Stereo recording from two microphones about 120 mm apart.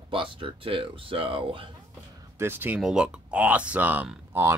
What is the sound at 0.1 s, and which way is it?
Speech, 45° right (ahead or behind).